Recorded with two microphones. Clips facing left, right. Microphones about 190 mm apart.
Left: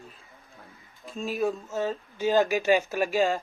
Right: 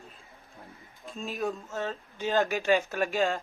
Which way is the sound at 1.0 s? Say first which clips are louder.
Left 5 dB; centre (ahead or behind).